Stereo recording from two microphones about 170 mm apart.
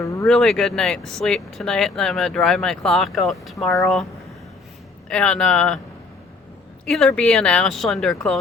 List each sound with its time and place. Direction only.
0.0 s a sound: 20° left (ahead or behind)
0.3 s speech: 5° left (ahead or behind)
5.0 s speech: 5° left (ahead or behind)
6.8 s speech: centre (ahead or behind)